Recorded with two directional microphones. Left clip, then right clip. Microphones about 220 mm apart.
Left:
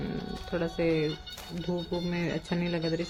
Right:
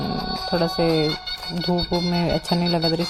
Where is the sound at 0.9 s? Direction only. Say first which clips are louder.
Right 9 dB; 40° right (ahead or behind).